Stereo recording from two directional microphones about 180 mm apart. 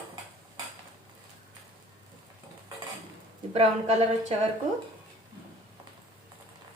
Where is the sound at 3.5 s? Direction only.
35° right (ahead or behind).